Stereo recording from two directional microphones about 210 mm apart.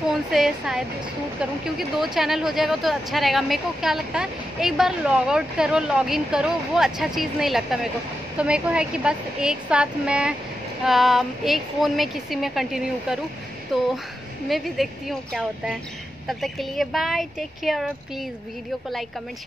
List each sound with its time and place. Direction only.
0.1 s a woman's voice: centre (ahead or behind)